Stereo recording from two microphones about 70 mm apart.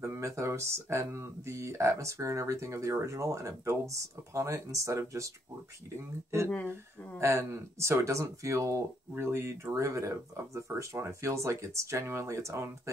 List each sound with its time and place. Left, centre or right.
0.0 s speech: right
7.2 s speech: right
9.1 s speech: right